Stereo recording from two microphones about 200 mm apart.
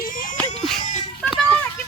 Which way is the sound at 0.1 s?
40° left (ahead or behind).